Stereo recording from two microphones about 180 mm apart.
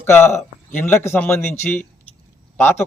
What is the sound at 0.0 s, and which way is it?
Speech, 10° left (ahead or behind).